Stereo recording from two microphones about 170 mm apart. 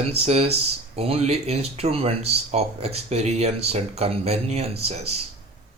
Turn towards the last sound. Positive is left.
turn(degrees=-40)  # may be behind; listen again after turning